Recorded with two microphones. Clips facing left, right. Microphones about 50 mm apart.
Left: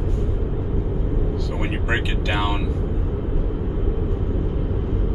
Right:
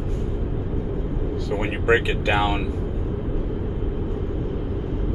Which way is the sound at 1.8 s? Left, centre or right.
Right.